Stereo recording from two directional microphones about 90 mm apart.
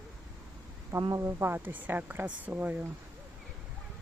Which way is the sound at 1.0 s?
35° right (ahead or behind).